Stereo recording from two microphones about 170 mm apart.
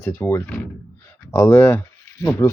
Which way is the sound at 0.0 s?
15° left (ahead or behind).